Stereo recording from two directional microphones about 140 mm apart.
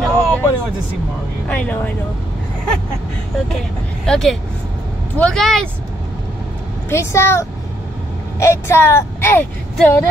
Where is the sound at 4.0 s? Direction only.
5° left (ahead or behind).